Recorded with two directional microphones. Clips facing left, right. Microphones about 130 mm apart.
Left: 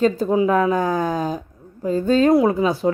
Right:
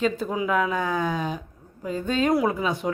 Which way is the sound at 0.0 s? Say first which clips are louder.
Left 8 dB; 35° left (ahead or behind).